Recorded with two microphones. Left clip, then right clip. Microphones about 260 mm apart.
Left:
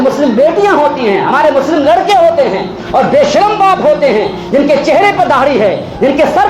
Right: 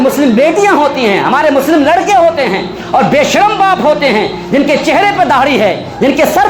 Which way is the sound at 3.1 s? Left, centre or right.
Right.